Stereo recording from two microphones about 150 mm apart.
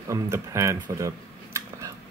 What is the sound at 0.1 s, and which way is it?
Speech, 20° right (ahead or behind).